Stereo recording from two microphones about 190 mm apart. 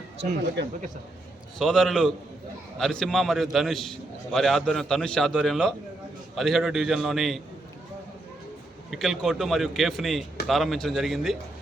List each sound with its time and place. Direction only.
0.2 s speech: 65° right (ahead or behind)
1.5 s a man's voice: centre (ahead or behind)
8.9 s a man's voice: centre (ahead or behind)